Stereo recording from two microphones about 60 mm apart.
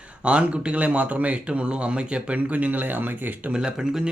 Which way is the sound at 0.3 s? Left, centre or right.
Centre.